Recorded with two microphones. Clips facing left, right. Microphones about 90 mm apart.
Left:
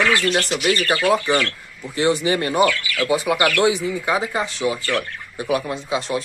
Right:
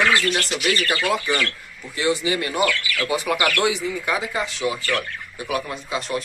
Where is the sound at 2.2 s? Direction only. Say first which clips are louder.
Left 4 dB; 35° left (ahead or behind).